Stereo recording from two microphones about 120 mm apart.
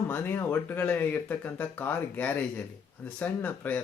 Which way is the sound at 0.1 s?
15° left (ahead or behind).